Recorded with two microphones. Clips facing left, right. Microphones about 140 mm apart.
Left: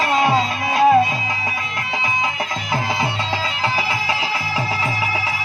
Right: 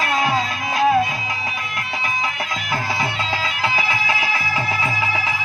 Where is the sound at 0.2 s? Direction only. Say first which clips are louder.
Left 3 dB; 25° left (ahead or behind).